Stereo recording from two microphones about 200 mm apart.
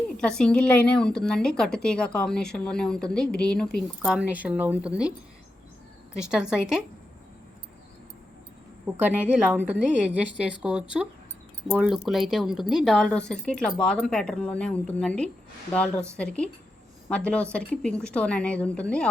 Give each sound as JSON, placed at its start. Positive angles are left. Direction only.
{"t": 0.2, "sound": "a woman's voice", "side_deg": 5}
{"t": 6.1, "sound": "a woman's voice", "side_deg": -5}
{"t": 9.0, "sound": "a woman's voice", "side_deg": -5}